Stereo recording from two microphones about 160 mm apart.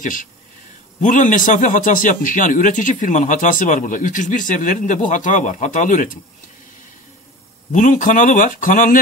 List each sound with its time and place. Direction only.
0.0 s speech: 55° left (ahead or behind)
7.7 s speech: 55° left (ahead or behind)